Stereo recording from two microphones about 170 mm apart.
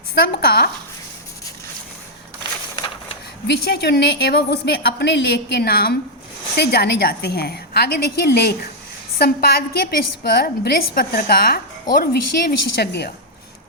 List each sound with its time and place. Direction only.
0.1 s a woman's voice: 65° left (ahead or behind)
2.7 s a sound: 25° left (ahead or behind)
3.4 s a woman's voice: 70° left (ahead or behind)